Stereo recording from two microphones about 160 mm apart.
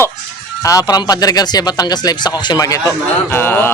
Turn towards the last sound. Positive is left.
turn(degrees=15)  # may be behind; listen again after turning